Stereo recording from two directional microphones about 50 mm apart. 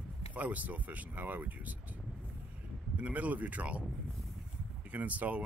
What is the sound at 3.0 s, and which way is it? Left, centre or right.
Speech, right.